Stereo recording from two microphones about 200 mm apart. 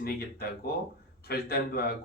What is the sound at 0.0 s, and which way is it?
Speech, 50° left (ahead or behind).